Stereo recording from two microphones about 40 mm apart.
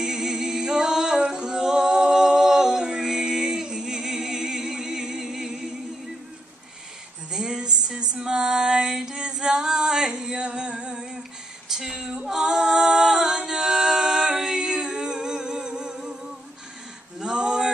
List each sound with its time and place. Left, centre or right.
0.0 s music: centre
7.2 s music: right
8.9 s female singing: centre
11.7 s a sound: centre
12.3 s a capella: centre
17.2 s male singing: right